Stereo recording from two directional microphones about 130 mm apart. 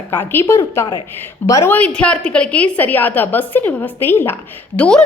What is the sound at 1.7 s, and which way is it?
A woman's voice, 10° left (ahead or behind).